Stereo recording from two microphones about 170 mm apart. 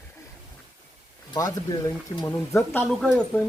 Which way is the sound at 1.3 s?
20° left (ahead or behind).